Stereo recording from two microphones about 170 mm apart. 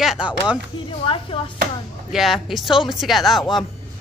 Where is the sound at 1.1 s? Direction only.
30° left (ahead or behind).